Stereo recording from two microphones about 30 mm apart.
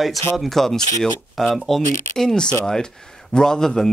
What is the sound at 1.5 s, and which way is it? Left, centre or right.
Speech, centre.